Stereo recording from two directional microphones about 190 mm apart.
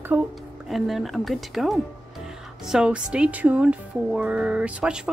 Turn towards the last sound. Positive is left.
turn(degrees=-5)  # may be behind; listen again after turning